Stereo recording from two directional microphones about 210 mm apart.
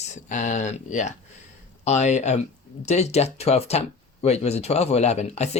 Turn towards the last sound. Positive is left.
turn(degrees=30)  # may be behind; listen again after turning